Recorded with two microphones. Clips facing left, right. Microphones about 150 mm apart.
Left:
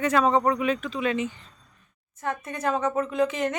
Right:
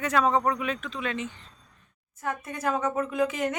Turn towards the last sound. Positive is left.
turn(degrees=-5)  # may be behind; listen again after turning